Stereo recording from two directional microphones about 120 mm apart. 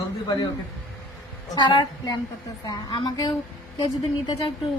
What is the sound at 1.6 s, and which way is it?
A woman's voice, 40° left (ahead or behind).